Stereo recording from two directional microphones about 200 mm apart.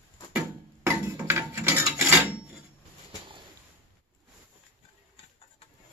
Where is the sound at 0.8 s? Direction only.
10° right (ahead or behind).